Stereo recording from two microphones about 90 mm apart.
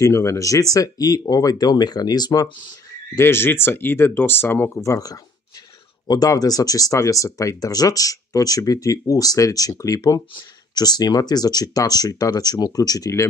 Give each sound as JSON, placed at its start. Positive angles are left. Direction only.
{"t": 0.0, "sound": "speech", "side_deg": 30}
{"t": 3.2, "sound": "speech", "side_deg": 25}